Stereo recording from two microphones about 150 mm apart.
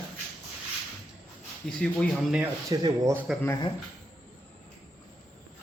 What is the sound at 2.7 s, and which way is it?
Speech, 20° right (ahead or behind).